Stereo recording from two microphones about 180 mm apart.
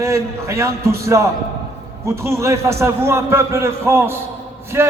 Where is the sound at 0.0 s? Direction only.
15° right (ahead or behind).